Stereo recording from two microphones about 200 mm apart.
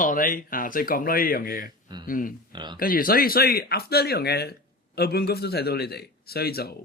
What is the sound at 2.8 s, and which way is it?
Speech, 45° left (ahead or behind).